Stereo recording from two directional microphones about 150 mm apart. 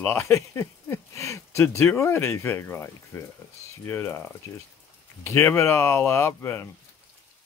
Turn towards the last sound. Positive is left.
turn(degrees=15)  # may be behind; listen again after turning